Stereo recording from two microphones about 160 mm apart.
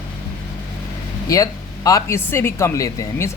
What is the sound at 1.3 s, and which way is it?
Speech, 20° left (ahead or behind).